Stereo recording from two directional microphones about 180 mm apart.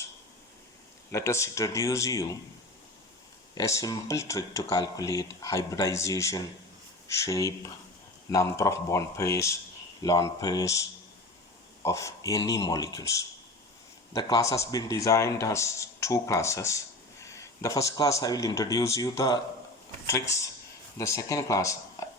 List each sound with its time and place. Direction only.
1.1 s a man's voice: 15° left (ahead or behind)
3.5 s a man's voice: 20° left (ahead or behind)